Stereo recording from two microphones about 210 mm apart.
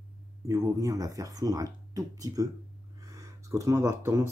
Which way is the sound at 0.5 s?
15° right (ahead or behind).